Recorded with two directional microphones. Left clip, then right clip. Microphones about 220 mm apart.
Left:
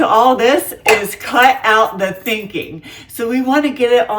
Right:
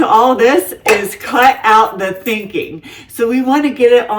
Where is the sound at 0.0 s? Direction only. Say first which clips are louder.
Right 2 dB; 15° left (ahead or behind).